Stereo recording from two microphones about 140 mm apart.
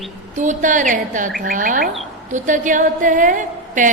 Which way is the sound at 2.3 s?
60° right (ahead or behind).